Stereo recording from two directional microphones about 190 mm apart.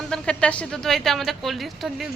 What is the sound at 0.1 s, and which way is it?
Speech, 5° left (ahead or behind).